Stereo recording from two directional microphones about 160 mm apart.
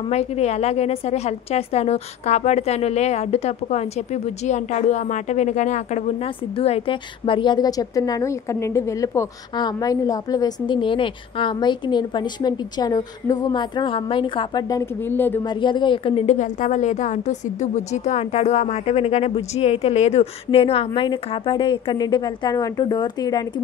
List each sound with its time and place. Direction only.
0.1 s a woman's voice: 40° left (ahead or behind)
6.6 s a woman's voice: 35° left (ahead or behind); by 15.4 s 15° left (ahead or behind)
15.4 s a woman's voice: 30° left (ahead or behind)